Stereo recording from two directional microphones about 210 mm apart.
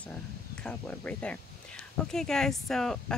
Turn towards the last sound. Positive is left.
turn(degrees=0)  # may be behind; listen again after turning